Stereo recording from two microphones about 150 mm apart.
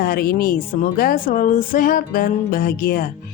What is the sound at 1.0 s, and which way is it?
Speech, 70° left (ahead or behind).